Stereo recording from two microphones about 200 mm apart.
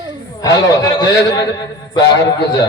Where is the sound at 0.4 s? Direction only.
20° left (ahead or behind).